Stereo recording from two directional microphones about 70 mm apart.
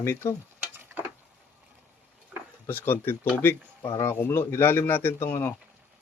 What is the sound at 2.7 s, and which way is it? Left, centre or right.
Speech, left.